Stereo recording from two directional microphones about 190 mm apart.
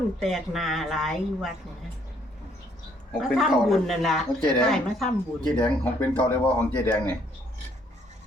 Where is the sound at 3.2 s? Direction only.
Centre (ahead or behind).